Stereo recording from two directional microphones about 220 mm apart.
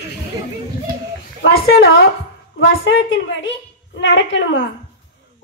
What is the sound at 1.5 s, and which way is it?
Speech, 45° left (ahead or behind).